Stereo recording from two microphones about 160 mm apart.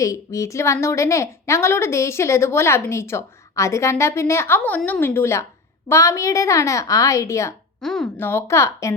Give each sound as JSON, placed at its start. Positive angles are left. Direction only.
{"t": 0.0, "sound": "a woman's voice", "side_deg": 20}
{"t": 7.8, "sound": "a woman's voice", "side_deg": 5}